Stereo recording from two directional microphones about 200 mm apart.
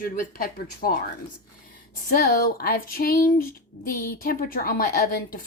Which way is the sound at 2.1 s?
45° left (ahead or behind).